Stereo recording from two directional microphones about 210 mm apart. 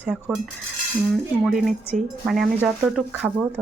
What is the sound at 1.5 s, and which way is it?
Speech, centre (ahead or behind).